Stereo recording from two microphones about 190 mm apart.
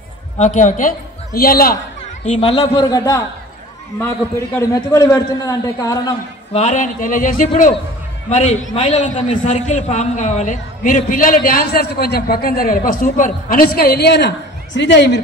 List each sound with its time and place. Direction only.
0.4 s a man's voice: 40° left (ahead or behind)
2.2 s a man's voice: 30° left (ahead or behind)
6.5 s a man's voice: 35° left (ahead or behind)
8.7 s a man's voice: 35° left (ahead or behind); by 15.2 s 65° left (ahead or behind)